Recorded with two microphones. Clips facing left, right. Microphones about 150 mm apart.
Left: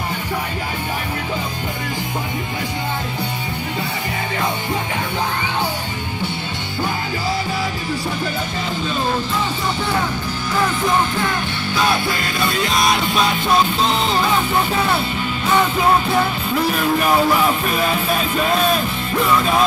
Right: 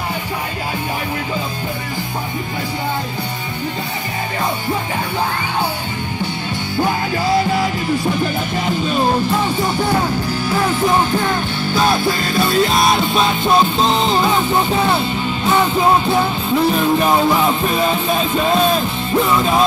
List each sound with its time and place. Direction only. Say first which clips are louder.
12.4 s music: right 6 dB; 35° right (ahead or behind)
12.7 s music: right 3 dB; centre (ahead or behind)
16.7 s music: right 2 dB; 30° right (ahead or behind)